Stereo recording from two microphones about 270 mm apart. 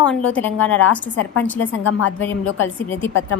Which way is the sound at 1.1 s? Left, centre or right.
Left.